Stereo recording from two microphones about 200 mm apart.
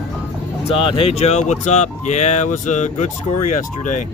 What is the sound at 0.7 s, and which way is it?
Speech, 30° left (ahead or behind).